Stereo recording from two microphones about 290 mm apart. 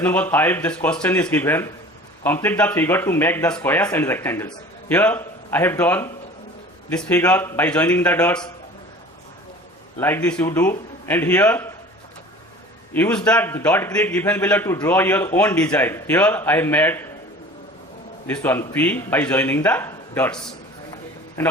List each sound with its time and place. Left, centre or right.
0.0 s a man's voice: centre
10.0 s a man's voice: centre
12.9 s a man's voice: centre
18.3 s a man's voice: centre